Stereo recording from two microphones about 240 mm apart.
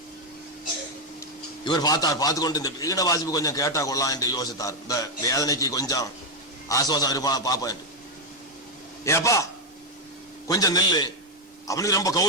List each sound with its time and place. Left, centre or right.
1.2 s a man's voice: centre
9.0 s a man's voice: centre